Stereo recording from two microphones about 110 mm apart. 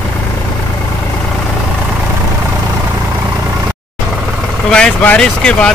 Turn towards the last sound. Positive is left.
turn(degrees=10)  # may be behind; listen again after turning